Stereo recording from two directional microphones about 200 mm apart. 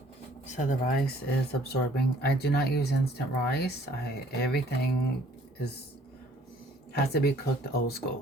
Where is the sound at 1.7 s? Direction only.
55° left (ahead or behind).